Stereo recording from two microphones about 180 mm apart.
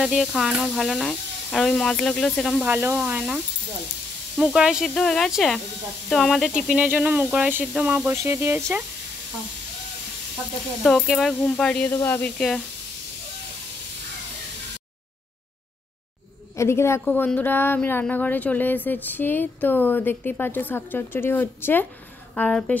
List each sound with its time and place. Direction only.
0.0 s speech: centre (ahead or behind)
2.7 s speech: 10° right (ahead or behind)
4.4 s speech: 5° right (ahead or behind)
10.8 s speech: centre (ahead or behind)
16.5 s a woman's voice: 15° left (ahead or behind)